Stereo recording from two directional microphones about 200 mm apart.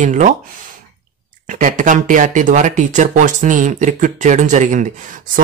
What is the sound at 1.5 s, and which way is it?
Speech, 40° right (ahead or behind).